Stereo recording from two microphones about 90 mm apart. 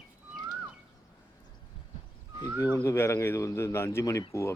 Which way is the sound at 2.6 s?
35° left (ahead or behind).